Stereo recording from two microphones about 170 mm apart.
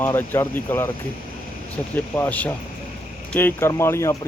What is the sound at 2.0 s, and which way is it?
Speech, 10° left (ahead or behind).